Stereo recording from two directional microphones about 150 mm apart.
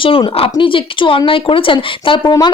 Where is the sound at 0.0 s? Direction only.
35° left (ahead or behind).